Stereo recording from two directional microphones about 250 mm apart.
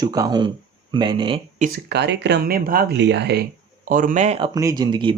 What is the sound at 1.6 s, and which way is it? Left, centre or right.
Speech, right.